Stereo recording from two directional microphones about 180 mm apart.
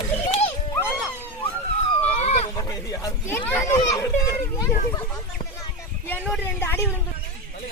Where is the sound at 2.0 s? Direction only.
35° left (ahead or behind).